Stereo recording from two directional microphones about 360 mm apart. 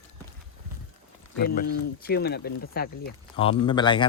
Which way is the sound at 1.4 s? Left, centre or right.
Left.